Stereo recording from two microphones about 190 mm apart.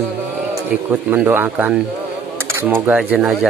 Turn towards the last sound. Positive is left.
turn(degrees=-5)  # may be behind; listen again after turning